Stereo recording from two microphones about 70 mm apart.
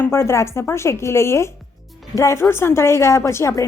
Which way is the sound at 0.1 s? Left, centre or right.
Left.